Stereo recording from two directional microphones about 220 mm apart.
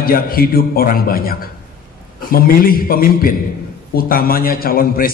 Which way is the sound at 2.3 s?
40° left (ahead or behind).